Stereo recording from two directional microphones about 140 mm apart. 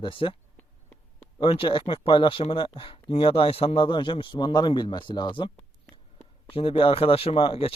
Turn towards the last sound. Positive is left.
turn(degrees=40)  # may be behind; listen again after turning